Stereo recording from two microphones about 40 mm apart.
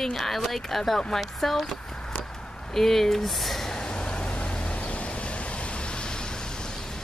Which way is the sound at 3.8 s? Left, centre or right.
Left.